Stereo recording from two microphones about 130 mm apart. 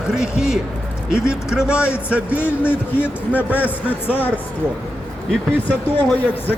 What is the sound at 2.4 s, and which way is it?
Speech, 15° left (ahead or behind).